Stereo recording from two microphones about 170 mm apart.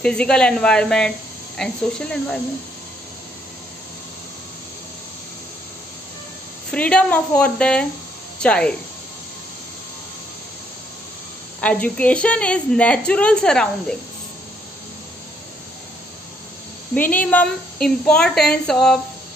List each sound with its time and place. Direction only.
0.0 s a woman's voice: 5° left (ahead or behind)
6.7 s a woman's voice: 5° left (ahead or behind)
11.6 s a woman's voice: 10° left (ahead or behind)
16.9 s a woman's voice: 10° left (ahead or behind)